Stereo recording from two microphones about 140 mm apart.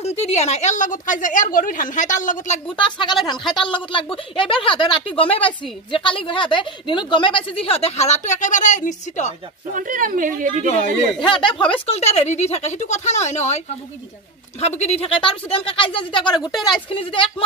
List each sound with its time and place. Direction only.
0.0 s a woman's voice: 50° left (ahead or behind)
2.7 s a woman's voice: 35° left (ahead or behind); by 9.3 s 60° left (ahead or behind)
9.7 s a woman's voice: 70° right (ahead or behind)
11.1 s speech: 35° left (ahead or behind); by 13.6 s 55° left (ahead or behind)
14.6 s a woman's voice: 50° left (ahead or behind)